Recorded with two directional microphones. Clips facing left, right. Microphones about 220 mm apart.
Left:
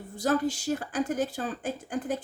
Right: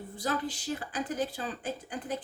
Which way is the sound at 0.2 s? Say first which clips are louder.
Left 7 dB; 45° left (ahead or behind).